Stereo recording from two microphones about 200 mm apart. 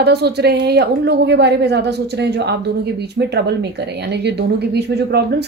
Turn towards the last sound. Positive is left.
turn(degrees=-55)  # may be behind; listen again after turning